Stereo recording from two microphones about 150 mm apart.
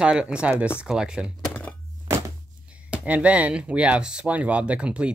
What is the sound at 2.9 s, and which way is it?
Speech, 10° right (ahead or behind).